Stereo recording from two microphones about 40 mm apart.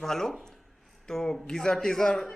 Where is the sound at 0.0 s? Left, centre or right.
Centre.